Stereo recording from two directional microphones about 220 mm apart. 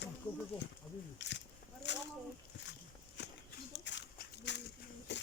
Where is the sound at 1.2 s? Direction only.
55° left (ahead or behind).